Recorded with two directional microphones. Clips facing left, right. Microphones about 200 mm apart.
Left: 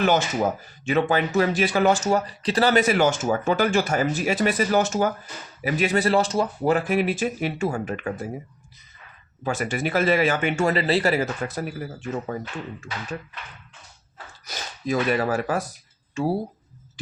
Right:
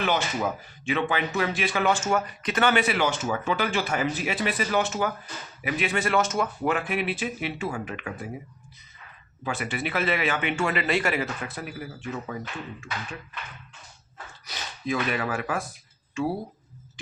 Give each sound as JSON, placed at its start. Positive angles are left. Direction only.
{"t": 0.0, "sound": "speech", "side_deg": 45}
{"t": 9.4, "sound": "speech", "side_deg": 45}
{"t": 14.4, "sound": "speech", "side_deg": 40}